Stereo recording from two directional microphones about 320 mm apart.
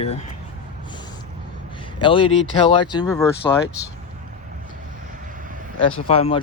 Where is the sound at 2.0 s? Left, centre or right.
Centre.